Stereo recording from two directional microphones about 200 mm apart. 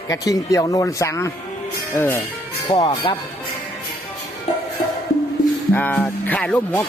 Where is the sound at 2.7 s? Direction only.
25° left (ahead or behind).